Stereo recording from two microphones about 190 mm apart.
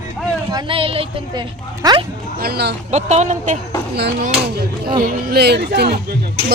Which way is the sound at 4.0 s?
60° right (ahead or behind).